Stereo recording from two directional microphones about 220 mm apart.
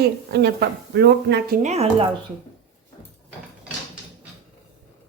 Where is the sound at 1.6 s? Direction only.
30° right (ahead or behind).